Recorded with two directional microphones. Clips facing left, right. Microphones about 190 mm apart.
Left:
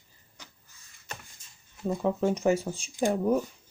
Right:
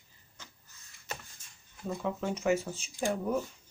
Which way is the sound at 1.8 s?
35° left (ahead or behind).